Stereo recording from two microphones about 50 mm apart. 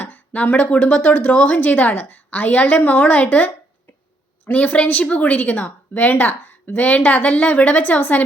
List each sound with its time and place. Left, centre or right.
0.0 s a woman's voice: left
4.5 s a woman's voice: left